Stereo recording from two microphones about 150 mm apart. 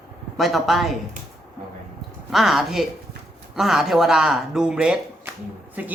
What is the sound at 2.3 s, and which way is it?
Speech, centre (ahead or behind).